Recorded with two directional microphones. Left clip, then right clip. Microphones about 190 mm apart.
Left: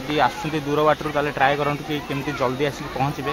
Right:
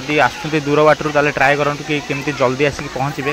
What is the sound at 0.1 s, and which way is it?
Speech, 15° right (ahead or behind).